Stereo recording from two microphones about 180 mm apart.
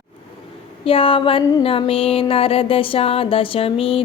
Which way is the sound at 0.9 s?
30° left (ahead or behind).